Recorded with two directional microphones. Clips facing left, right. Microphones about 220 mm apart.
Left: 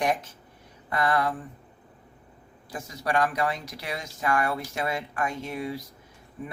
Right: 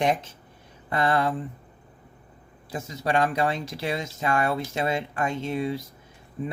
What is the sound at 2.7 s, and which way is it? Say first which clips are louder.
Speech: right 2 dB; 25° right (ahead or behind).